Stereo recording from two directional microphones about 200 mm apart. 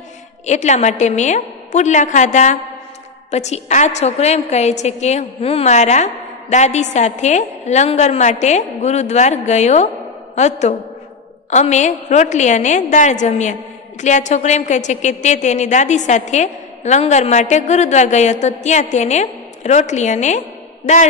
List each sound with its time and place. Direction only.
0.5 s a woman's voice: 35° left (ahead or behind)